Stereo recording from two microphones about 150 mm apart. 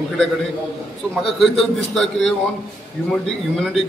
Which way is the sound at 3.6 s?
Centre (ahead or behind).